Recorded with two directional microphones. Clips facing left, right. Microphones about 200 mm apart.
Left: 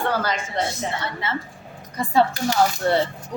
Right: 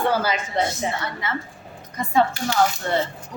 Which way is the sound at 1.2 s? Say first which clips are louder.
Left 1 dB; 25° left (ahead or behind).